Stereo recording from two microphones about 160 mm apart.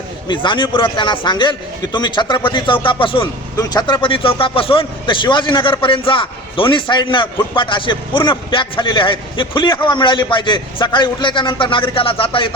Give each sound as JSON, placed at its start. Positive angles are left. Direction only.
{"t": 0.3, "sound": "a man's voice", "side_deg": 30}